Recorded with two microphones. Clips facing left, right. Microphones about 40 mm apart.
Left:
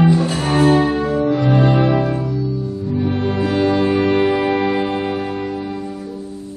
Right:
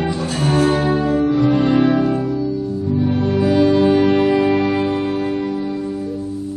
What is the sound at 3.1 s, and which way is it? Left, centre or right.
Music, left.